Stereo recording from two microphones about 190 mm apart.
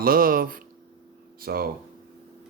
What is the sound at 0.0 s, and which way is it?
Speech, 50° right (ahead or behind).